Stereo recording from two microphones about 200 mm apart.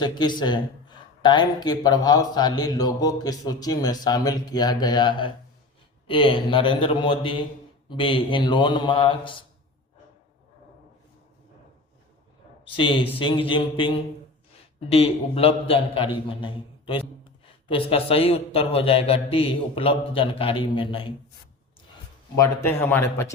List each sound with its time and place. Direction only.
0.0 s a man's voice: 20° left (ahead or behind)
12.6 s a man's voice: 25° left (ahead or behind)
22.4 s a man's voice: 10° left (ahead or behind)